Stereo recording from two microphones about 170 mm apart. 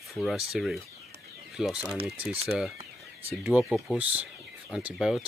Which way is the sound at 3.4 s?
5° right (ahead or behind).